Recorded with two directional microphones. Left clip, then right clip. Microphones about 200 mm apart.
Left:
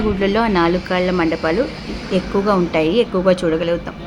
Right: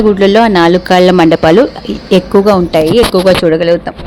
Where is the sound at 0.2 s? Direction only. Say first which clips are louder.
Right 7 dB; 35° right (ahead or behind).